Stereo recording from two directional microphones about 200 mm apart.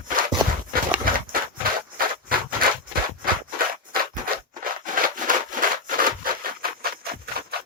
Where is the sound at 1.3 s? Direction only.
45° right (ahead or behind).